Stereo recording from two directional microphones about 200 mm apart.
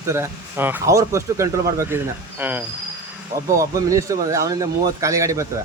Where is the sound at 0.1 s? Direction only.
10° right (ahead or behind).